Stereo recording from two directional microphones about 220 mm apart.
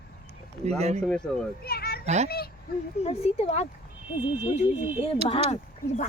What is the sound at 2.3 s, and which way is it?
Speech, 45° left (ahead or behind).